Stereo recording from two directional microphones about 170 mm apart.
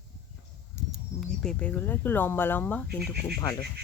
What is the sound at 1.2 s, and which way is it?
Speech, 5° left (ahead or behind).